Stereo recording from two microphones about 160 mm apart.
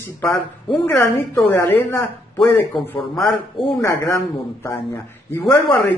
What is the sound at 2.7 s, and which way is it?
Speech, centre (ahead or behind).